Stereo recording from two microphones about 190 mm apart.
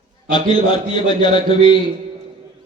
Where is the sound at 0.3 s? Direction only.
25° left (ahead or behind).